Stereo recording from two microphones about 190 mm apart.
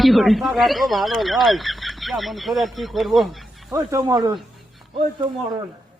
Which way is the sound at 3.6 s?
20° right (ahead or behind).